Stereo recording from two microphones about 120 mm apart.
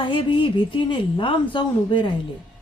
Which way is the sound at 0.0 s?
45° left (ahead or behind).